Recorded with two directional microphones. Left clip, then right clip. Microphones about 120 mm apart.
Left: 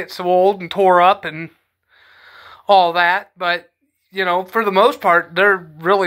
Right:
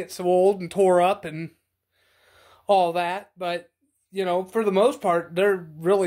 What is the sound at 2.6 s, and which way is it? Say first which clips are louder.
Speech: left 8 dB; 35° right (ahead or behind).